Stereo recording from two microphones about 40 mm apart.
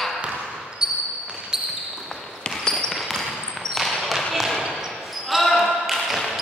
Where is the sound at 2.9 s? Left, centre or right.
Centre.